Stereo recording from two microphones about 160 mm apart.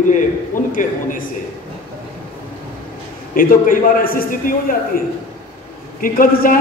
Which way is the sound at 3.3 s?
60° left (ahead or behind).